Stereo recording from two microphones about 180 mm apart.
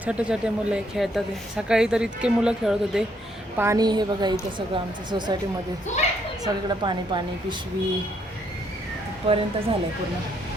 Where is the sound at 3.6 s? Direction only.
20° right (ahead or behind).